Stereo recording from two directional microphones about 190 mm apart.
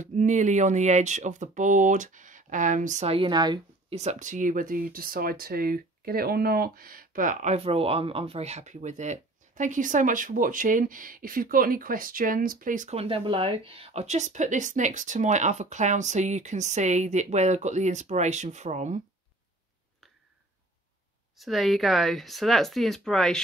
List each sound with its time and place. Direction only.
0.0 s speech: 40° right (ahead or behind); by 3.6 s 25° right (ahead or behind)
3.9 s speech: 35° right (ahead or behind)
21.4 s speech: centre (ahead or behind)